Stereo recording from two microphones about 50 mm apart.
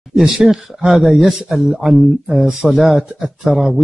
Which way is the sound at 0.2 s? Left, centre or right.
Centre.